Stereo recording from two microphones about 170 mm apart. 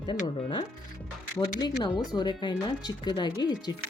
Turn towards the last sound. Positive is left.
turn(degrees=25)  # may be behind; listen again after turning